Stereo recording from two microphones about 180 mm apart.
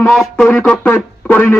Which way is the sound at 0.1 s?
Centre (ahead or behind).